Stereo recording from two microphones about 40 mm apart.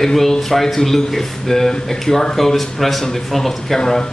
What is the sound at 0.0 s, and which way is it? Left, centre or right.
A man's voice, centre.